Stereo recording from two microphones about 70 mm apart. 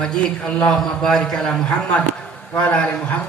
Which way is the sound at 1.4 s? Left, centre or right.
Centre.